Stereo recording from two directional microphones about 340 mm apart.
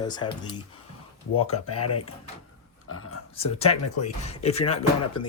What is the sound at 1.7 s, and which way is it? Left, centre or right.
Speech, left.